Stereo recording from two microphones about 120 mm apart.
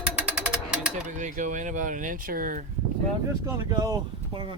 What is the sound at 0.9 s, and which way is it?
Speech, 90° right.